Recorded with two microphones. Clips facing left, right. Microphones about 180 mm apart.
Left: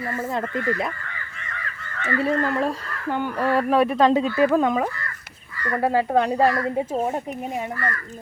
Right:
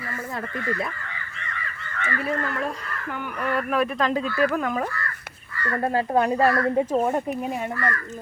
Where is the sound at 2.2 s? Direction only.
30° left (ahead or behind).